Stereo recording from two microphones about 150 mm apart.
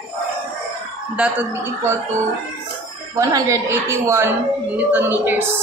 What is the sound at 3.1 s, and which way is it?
A woman's voice, 25° right (ahead or behind).